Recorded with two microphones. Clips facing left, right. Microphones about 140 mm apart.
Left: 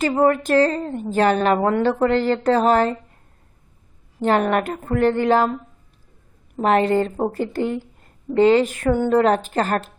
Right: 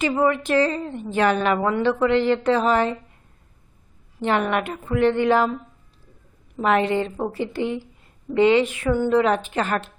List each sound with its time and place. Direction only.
0.2 s speech: 45° left (ahead or behind)
4.2 s speech: 40° left (ahead or behind)
6.6 s a woman's voice: 40° left (ahead or behind)